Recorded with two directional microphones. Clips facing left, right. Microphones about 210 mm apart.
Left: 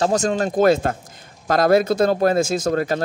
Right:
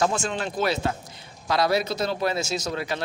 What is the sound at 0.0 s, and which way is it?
Speech, 40° left (ahead or behind).